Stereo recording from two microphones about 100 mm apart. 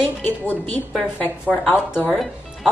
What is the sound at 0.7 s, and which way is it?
Speech, 20° left (ahead or behind).